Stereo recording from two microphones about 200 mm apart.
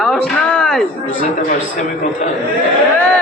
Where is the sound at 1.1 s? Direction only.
40° left (ahead or behind).